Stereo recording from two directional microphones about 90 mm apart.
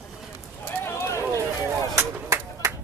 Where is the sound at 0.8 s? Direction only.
30° left (ahead or behind).